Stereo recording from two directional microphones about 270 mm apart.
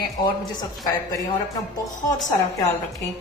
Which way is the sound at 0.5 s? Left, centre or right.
Centre.